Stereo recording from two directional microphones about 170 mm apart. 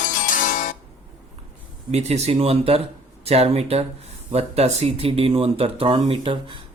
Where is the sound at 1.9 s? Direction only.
40° right (ahead or behind).